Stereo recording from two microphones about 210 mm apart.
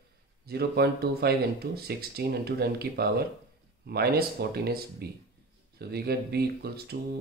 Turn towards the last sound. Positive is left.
turn(degrees=-50)  # may be behind; listen again after turning